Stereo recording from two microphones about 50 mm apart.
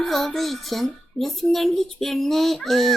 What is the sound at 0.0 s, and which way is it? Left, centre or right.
Speech, centre.